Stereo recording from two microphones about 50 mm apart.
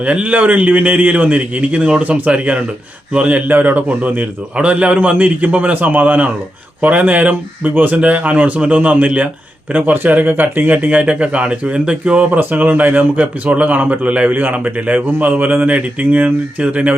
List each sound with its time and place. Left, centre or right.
0.0 s a man's voice: right